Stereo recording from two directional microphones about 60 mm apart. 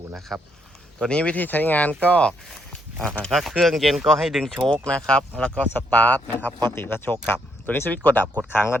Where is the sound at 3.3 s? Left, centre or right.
Centre.